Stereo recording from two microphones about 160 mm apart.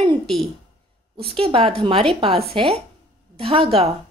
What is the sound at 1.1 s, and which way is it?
A woman's voice, 35° right (ahead or behind).